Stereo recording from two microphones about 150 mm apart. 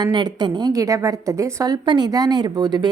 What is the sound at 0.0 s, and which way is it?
A woman's voice, 30° right (ahead or behind).